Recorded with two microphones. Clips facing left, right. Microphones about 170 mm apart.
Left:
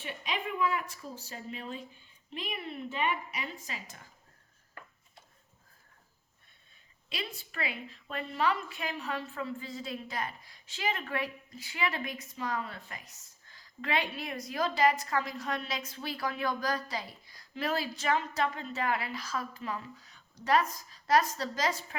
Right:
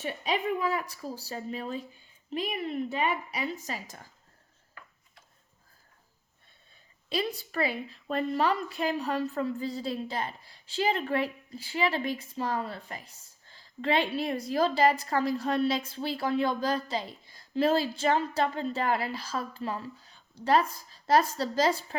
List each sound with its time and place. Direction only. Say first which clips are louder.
0.0 s a woman's voice: right 6 dB; 40° right (ahead or behind)
7.1 s a woman's voice: right 9 dB; 35° right (ahead or behind)